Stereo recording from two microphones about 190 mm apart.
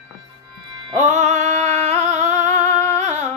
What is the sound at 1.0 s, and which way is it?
Singing, 40° right (ahead or behind).